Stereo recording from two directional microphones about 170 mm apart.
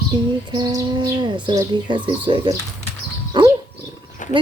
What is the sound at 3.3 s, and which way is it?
Dog, 30° right (ahead or behind).